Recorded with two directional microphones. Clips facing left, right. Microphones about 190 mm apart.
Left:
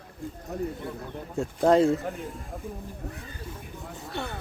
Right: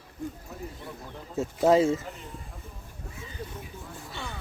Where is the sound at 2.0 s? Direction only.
55° left (ahead or behind).